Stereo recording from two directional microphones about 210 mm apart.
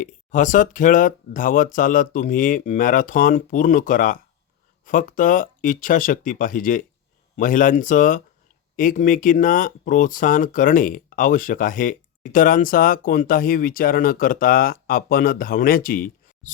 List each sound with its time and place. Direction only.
0.0 s speech: 35° left (ahead or behind)